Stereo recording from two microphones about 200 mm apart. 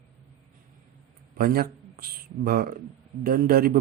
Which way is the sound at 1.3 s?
50° right (ahead or behind).